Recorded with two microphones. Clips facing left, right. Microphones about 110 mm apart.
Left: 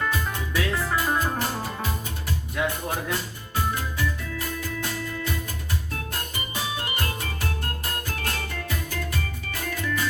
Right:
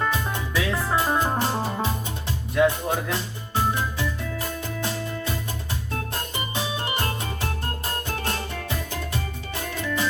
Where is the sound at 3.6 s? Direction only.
25° right (ahead or behind).